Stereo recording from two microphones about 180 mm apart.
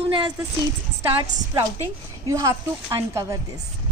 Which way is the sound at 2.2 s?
20° right (ahead or behind).